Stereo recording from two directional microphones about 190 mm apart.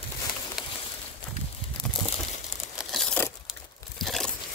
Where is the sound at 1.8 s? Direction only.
5° left (ahead or behind).